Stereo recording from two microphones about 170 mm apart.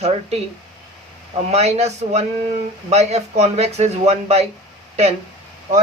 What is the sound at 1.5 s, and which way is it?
Speech, 40° right (ahead or behind).